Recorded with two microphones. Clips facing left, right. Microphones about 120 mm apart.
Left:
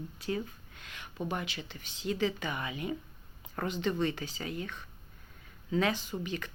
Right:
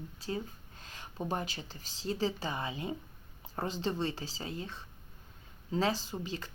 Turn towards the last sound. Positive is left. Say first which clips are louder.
# left 2 dB
turn(degrees=-30)  # may be behind; listen again after turning